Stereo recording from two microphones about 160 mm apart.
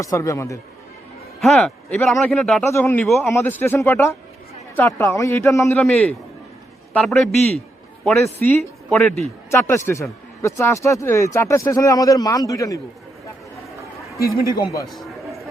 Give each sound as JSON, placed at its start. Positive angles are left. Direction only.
{"t": 0.0, "sound": "speech", "side_deg": 20}
{"t": 1.4, "sound": "speech", "side_deg": 5}
{"t": 2.6, "sound": "speech", "side_deg": 15}
{"t": 14.5, "sound": "speech", "side_deg": 20}
{"t": 14.8, "sound": "a sound", "side_deg": 0}